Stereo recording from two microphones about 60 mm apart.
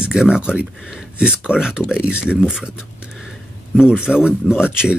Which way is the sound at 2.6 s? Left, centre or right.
Centre.